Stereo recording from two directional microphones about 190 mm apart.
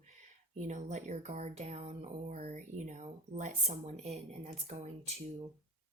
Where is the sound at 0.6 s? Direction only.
40° right (ahead or behind).